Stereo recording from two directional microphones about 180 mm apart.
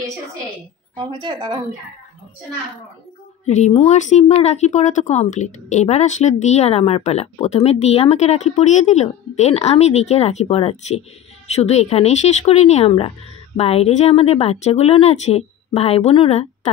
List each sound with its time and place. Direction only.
0.9 s a woman's voice: 25° right (ahead or behind)
3.4 s speech: 40° left (ahead or behind)